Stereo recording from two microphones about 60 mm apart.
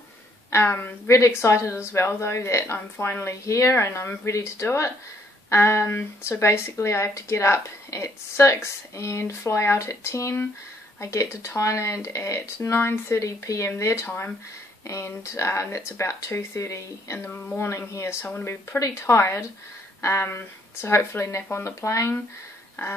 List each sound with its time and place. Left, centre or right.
0.5 s speech: left
1.0 s speech: left
13.2 s speech: left
14.0 s speech: left
14.9 s speech: left
18.4 s speech: left